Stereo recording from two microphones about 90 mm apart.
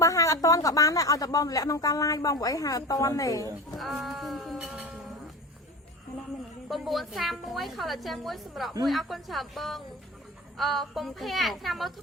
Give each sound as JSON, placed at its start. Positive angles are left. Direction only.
{"t": 0.0, "sound": "a woman's voice", "side_deg": 40}
{"t": 3.8, "sound": "a woman's voice", "side_deg": 0}
{"t": 6.7, "sound": "a woman's voice", "side_deg": 0}